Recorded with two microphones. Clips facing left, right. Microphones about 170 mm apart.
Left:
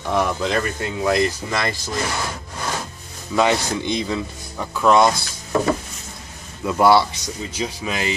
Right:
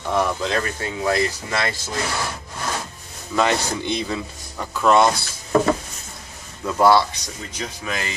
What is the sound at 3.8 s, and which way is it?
Speech, centre (ahead or behind).